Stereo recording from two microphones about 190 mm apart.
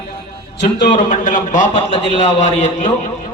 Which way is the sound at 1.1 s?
40° left (ahead or behind).